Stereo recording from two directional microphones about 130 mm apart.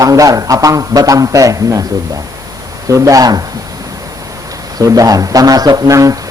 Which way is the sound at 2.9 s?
25° right (ahead or behind).